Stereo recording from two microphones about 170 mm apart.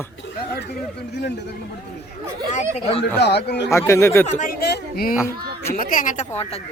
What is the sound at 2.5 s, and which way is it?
Speech, 35° left (ahead or behind).